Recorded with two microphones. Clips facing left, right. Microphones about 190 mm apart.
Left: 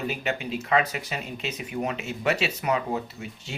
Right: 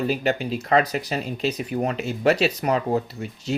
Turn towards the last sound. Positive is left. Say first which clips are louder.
# right 6 dB
turn(degrees=-35)  # may be behind; listen again after turning